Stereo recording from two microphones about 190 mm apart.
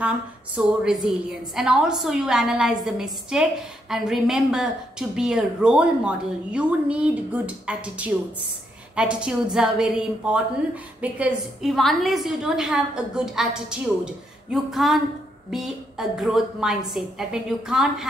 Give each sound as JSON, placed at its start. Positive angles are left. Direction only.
{"t": 0.6, "sound": "a woman's voice", "side_deg": -5}